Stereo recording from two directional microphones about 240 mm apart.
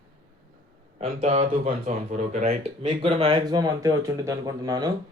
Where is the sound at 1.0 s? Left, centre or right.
Right.